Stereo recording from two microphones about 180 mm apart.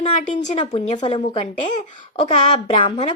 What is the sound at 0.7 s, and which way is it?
A woman's voice, 40° left (ahead or behind).